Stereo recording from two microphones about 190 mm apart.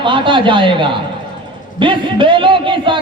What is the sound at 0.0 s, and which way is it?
A man's voice, 25° right (ahead or behind).